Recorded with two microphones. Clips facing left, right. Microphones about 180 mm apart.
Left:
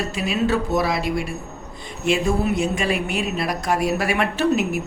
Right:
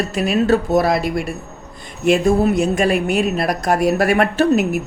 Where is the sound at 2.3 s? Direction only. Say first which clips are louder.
Right 6 dB; 40° right (ahead or behind).